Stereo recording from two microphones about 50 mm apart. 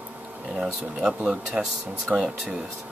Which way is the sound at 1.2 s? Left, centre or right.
Centre.